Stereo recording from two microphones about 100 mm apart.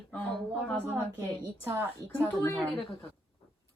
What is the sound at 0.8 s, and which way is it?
A woman's voice, 25° right (ahead or behind).